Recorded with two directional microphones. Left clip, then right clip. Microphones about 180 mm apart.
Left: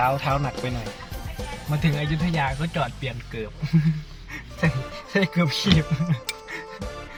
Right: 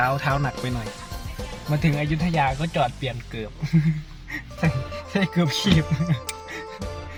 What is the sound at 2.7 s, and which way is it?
Speech, 15° right (ahead or behind).